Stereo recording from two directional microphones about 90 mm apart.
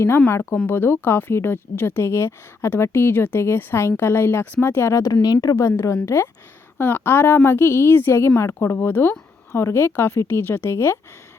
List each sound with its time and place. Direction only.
0.3 s a woman's voice: 30° left (ahead or behind)